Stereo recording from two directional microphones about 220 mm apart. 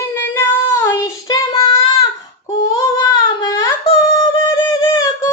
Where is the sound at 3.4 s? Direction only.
15° left (ahead or behind).